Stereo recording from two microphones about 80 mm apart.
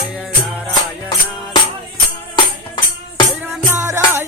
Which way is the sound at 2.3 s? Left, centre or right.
Left.